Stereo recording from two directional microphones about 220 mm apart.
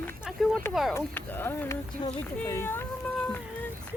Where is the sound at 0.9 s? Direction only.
10° left (ahead or behind).